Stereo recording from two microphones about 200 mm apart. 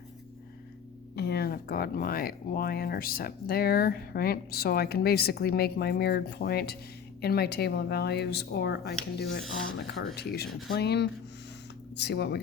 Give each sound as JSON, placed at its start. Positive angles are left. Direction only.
{"t": 1.1, "sound": "speech", "side_deg": 55}